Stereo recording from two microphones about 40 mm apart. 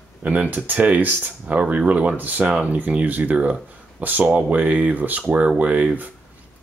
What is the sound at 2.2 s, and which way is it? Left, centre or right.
Speech, right.